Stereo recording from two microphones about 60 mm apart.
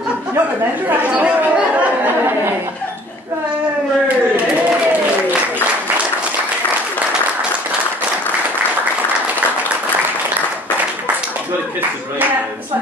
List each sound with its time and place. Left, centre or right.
0.8 s speech: right